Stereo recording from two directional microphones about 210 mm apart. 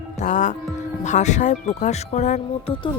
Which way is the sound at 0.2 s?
35° left (ahead or behind).